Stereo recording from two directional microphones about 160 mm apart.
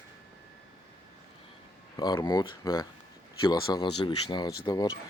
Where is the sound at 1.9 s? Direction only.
25° left (ahead or behind).